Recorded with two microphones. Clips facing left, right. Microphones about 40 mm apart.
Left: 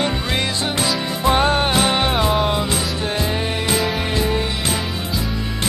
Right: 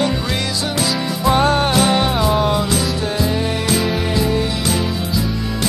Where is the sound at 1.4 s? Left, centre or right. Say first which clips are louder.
Right 3 dB; left.